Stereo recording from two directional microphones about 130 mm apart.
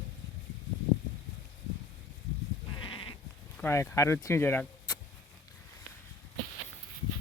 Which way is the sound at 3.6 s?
15° left (ahead or behind).